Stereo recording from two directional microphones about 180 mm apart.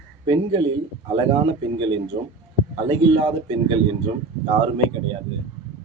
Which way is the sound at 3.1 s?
25° right (ahead or behind).